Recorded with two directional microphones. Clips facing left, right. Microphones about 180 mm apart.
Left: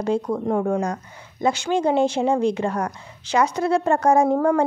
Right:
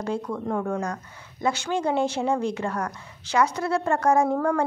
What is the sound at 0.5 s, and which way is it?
Speech, 20° left (ahead or behind).